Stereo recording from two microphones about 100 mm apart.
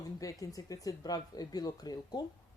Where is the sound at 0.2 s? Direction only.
35° left (ahead or behind).